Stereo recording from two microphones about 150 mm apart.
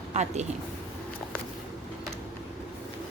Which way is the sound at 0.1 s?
50° right (ahead or behind).